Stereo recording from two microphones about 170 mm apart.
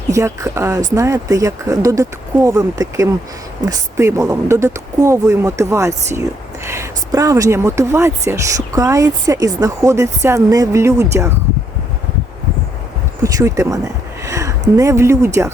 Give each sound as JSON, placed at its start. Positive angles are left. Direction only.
{"t": 0.1, "sound": "speech", "side_deg": -20}
{"t": 13.2, "sound": "speech", "side_deg": -20}